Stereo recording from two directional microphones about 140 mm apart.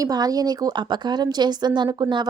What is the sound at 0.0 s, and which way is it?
A woman's voice, 25° right (ahead or behind).